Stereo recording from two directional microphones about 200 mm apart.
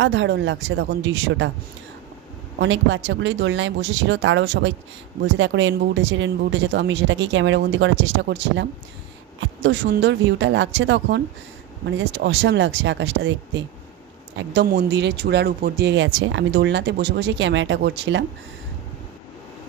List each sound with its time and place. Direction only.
0.0 s speech: 65° right (ahead or behind)
2.6 s speech: 65° right (ahead or behind)